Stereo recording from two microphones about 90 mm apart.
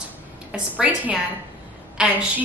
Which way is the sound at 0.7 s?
15° right (ahead or behind).